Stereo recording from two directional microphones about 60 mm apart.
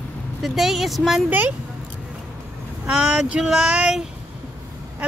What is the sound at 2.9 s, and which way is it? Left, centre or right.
Speech, centre.